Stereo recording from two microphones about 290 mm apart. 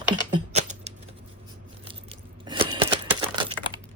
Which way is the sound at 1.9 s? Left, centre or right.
Centre.